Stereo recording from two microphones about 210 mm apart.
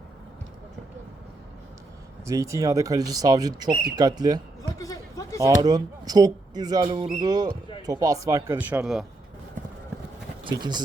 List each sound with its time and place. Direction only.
2.2 s speech: 15° right (ahead or behind)
4.8 s a sound: 15° left (ahead or behind)
5.4 s speech: 20° right (ahead or behind); by 9.0 s centre (ahead or behind)
10.4 s speech: 20° right (ahead or behind)